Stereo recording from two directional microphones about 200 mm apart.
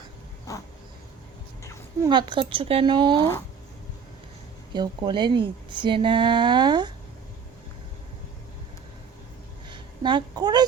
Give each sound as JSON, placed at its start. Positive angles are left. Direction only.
{"t": 0.5, "sound": "dog", "side_deg": 15}
{"t": 2.0, "sound": "speech", "side_deg": -25}
{"t": 4.7, "sound": "speech", "side_deg": -20}
{"t": 9.6, "sound": "a sound", "side_deg": -25}